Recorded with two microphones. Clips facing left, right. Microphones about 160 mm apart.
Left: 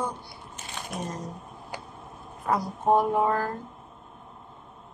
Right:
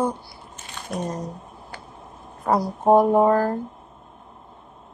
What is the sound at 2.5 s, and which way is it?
Female singing, 40° right (ahead or behind).